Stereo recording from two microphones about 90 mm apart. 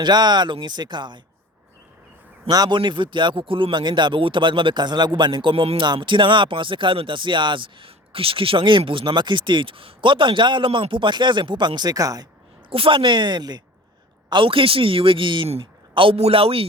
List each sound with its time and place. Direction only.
0.0 s speech: 55° right (ahead or behind)
2.5 s speech: 45° right (ahead or behind)
2.7 s speech: 65° right (ahead or behind); by 12.3 s 40° right (ahead or behind)
12.7 s speech: 80° right; by 13.6 s 50° right (ahead or behind)
14.3 s a man's voice: 70° right (ahead or behind)
16.0 s a man's voice: 85° right